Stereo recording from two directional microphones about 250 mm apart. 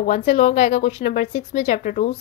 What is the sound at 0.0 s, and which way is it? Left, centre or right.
A woman's voice, left.